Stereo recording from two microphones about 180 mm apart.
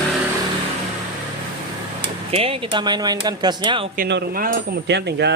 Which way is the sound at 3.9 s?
55° right (ahead or behind).